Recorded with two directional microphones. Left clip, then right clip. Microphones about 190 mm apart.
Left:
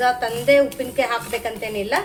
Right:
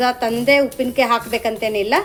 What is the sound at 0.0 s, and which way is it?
A woman's voice, 40° right (ahead or behind).